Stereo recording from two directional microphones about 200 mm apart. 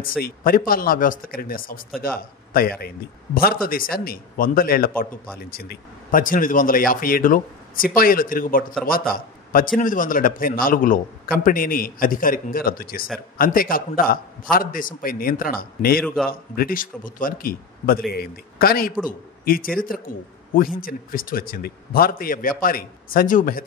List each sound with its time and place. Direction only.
0.0 s a man's voice: 45° left (ahead or behind)